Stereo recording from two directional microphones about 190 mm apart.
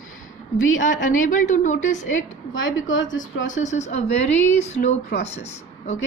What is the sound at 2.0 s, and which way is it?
A woman's voice, 90° left.